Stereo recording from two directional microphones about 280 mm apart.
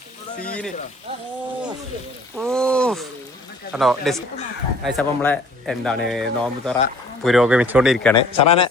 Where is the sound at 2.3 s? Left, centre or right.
Centre.